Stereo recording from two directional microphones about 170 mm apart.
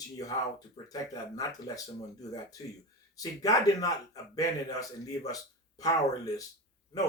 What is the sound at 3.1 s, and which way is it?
Speech, 20° left (ahead or behind).